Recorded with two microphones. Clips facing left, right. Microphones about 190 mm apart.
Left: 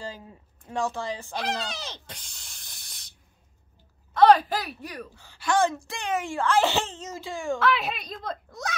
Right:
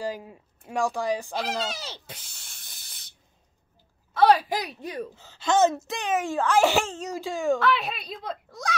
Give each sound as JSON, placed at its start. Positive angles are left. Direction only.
{"t": 0.0, "sound": "speech", "side_deg": -15}
{"t": 1.3, "sound": "speech", "side_deg": -5}
{"t": 4.1, "sound": "a woman's voice", "side_deg": -5}
{"t": 6.8, "sound": "a child's voice", "side_deg": 20}
{"t": 7.2, "sound": "speech", "side_deg": -15}
{"t": 7.5, "sound": "a child's voice", "side_deg": 0}